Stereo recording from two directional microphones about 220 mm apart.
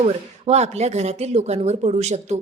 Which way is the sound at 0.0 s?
30° right (ahead or behind).